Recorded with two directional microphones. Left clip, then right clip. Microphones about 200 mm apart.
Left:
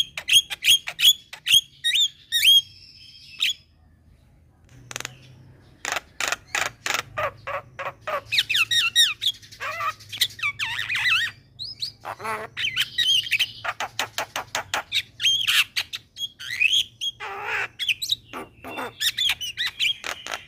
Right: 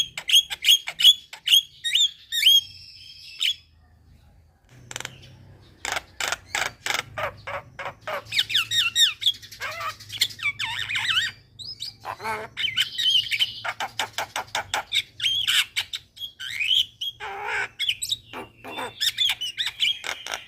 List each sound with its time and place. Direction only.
0.1 s rodents: 20° left (ahead or behind)
4.9 s a sound: 25° left (ahead or behind)
5.8 s mechanisms: 20° left (ahead or behind)
11.8 s bird: 25° left (ahead or behind)
15.4 s squawk: 20° left (ahead or behind)
16.4 s bird: 25° left (ahead or behind)